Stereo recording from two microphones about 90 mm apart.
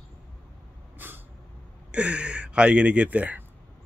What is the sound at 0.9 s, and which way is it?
Vehicle, 25° right (ahead or behind).